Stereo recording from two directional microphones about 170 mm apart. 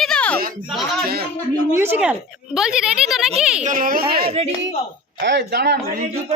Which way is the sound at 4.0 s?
30° right (ahead or behind).